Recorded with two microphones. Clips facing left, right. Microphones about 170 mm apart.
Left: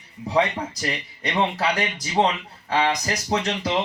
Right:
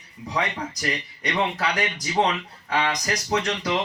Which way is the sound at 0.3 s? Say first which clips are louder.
Left 5 dB; 30° left (ahead or behind).